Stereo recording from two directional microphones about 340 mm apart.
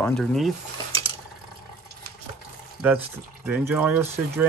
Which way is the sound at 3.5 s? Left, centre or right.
Centre.